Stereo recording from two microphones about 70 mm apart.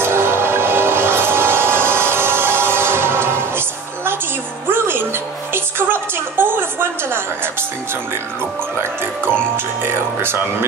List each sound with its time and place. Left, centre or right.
0.0 s music: right
9.8 s music: right